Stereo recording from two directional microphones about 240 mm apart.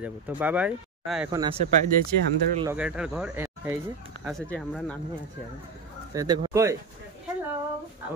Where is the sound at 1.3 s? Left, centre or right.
Centre.